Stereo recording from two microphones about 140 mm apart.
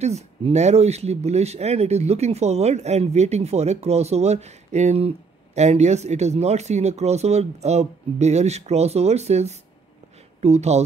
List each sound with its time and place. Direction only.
0.0 s speech: 50° right (ahead or behind)